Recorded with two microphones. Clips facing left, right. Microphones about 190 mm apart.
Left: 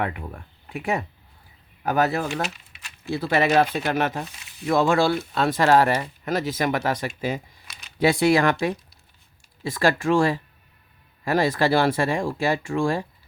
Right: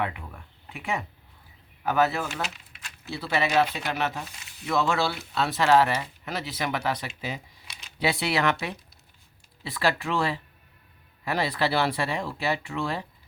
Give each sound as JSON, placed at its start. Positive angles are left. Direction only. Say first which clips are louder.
{"t": 0.0, "sound": "speech", "louder": "left 3 dB", "side_deg": 45}